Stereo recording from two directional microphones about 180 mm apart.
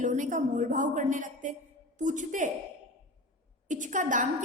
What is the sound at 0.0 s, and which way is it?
A woman's voice, 45° right (ahead or behind).